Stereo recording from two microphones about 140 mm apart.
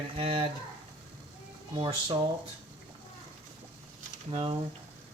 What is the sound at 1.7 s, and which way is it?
Speech, 35° right (ahead or behind).